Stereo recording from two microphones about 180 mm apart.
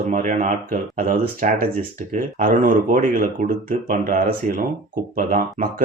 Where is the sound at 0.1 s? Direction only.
45° right (ahead or behind).